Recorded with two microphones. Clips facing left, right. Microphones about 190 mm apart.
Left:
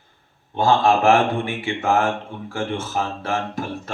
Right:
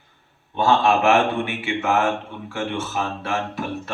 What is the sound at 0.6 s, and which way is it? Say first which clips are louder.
Speech: left 1 dB; 35° left (ahead or behind).